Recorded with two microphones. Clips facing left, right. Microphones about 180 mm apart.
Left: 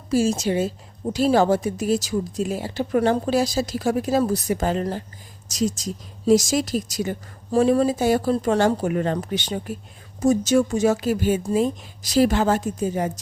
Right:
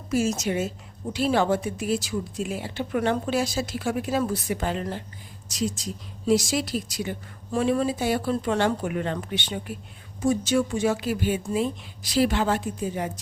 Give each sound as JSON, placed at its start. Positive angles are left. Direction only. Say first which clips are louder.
{"t": 0.1, "sound": "a woman's voice", "louder": "left 4 dB", "side_deg": 30}